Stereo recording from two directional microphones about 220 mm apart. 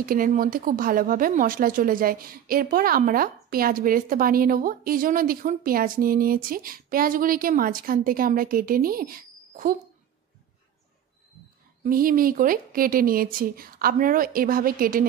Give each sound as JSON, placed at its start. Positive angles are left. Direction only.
{"t": 0.0, "sound": "speech", "side_deg": -40}
{"t": 11.8, "sound": "speech", "side_deg": -40}